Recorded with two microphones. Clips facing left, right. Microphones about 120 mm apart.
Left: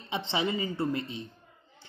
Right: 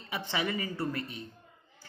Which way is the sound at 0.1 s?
25° left (ahead or behind).